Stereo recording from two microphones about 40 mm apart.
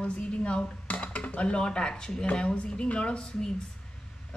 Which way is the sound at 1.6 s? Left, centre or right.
Left.